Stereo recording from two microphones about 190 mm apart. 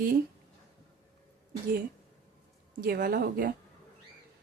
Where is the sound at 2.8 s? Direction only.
50° right (ahead or behind).